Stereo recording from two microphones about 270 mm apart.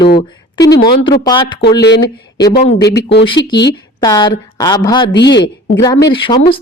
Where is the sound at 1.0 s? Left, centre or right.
Centre.